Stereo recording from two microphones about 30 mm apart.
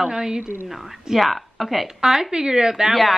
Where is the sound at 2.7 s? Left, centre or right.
Centre.